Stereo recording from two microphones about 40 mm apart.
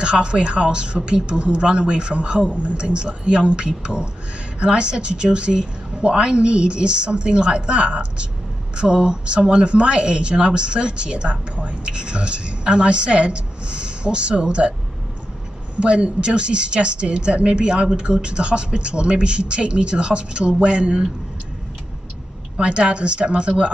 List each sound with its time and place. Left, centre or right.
0.0 s speech: right
15.8 s speech: right
22.6 s speech: right